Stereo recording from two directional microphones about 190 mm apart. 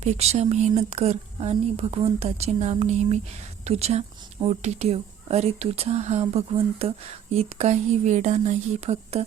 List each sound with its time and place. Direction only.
0.0 s speech: 35° right (ahead or behind)